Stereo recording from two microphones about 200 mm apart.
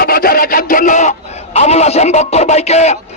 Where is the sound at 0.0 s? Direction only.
50° left (ahead or behind).